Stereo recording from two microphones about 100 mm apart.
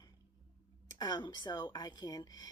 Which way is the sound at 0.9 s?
40° left (ahead or behind).